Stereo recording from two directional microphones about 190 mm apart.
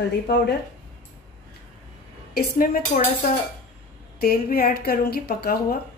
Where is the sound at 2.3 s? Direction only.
50° left (ahead or behind).